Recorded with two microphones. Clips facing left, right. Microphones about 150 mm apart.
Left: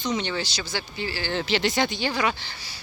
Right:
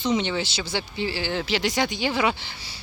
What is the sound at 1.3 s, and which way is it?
Speech, 5° right (ahead or behind).